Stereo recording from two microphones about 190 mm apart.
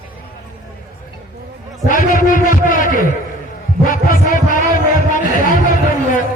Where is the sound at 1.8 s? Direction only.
45° left (ahead or behind).